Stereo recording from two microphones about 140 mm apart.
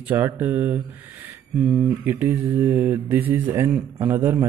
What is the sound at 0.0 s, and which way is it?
Speech, 15° right (ahead or behind).